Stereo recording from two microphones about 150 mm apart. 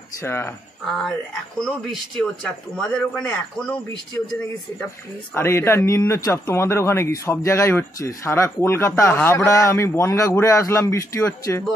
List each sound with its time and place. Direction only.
0.2 s speech: 15° left (ahead or behind)
1.6 s a man's voice: 5° left (ahead or behind)
5.3 s speech: 15° left (ahead or behind)